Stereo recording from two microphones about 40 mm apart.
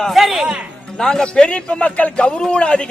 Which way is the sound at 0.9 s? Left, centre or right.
Centre.